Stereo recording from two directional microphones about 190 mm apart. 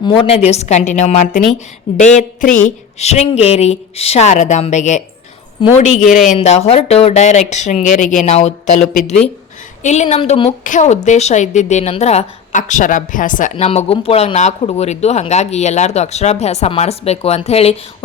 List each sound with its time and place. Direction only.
0.2 s speech: 35° left (ahead or behind)
5.6 s speech: 25° left (ahead or behind)
6.1 s speech: 40° left (ahead or behind)
10.6 s speech: 40° left (ahead or behind)
13.7 s speech: 30° left (ahead or behind)